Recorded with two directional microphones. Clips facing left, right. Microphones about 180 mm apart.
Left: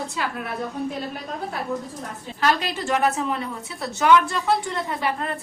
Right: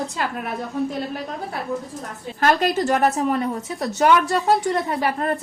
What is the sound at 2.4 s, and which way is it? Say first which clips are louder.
A woman's voice: right 5 dB; 50° right (ahead or behind).